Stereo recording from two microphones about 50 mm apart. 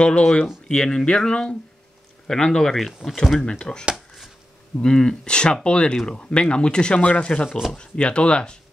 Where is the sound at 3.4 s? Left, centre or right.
Centre.